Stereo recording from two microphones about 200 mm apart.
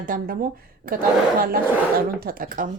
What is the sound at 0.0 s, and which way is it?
Speech, 45° right (ahead or behind).